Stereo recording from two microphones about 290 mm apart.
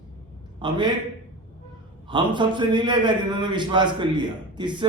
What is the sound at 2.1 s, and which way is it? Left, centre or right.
A man's voice, centre.